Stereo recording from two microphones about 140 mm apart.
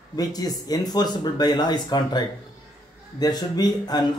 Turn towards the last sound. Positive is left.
turn(degrees=30)  # may be behind; listen again after turning